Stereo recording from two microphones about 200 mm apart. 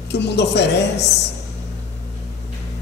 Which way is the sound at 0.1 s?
60° left (ahead or behind).